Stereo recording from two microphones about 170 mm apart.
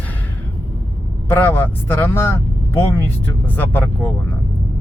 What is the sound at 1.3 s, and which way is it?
Speech, 15° left (ahead or behind).